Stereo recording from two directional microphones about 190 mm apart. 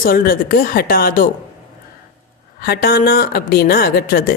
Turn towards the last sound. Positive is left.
turn(degrees=50)  # may be behind; listen again after turning